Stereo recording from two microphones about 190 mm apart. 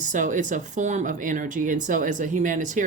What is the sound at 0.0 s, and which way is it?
Speech, 40° right (ahead or behind).